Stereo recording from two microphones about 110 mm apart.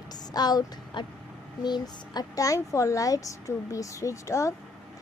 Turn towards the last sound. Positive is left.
turn(degrees=30)  # may be behind; listen again after turning